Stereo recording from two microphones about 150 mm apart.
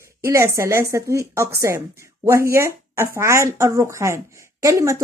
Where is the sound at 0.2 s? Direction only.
20° right (ahead or behind).